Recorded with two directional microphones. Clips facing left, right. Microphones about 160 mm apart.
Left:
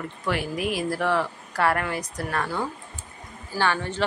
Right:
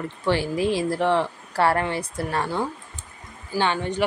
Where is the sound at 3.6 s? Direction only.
15° right (ahead or behind).